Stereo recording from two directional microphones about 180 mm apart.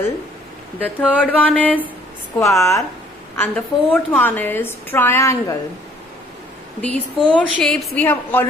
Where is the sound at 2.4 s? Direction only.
15° left (ahead or behind).